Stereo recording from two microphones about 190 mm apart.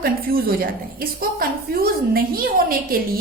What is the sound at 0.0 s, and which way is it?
A woman's voice, 50° right (ahead or behind).